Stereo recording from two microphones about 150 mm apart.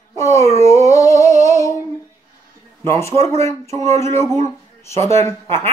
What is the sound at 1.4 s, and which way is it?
Female singing, 20° left (ahead or behind).